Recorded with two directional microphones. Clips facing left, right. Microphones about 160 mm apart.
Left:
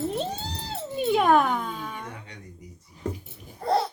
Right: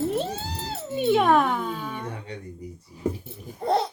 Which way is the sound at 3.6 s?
20° right (ahead or behind).